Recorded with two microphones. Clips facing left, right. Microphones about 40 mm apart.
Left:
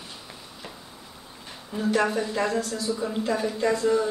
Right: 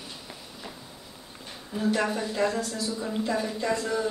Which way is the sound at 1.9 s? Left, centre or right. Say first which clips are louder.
Left 5 dB; centre.